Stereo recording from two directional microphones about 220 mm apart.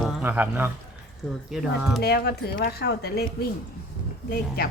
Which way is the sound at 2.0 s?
45° left (ahead or behind).